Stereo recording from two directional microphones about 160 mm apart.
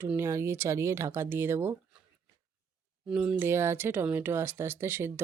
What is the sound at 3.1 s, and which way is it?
Speech, 5° right (ahead or behind).